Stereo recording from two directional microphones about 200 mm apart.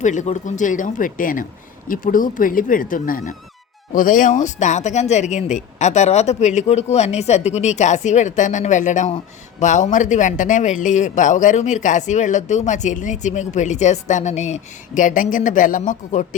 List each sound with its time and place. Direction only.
0.0 s speech: 35° left (ahead or behind)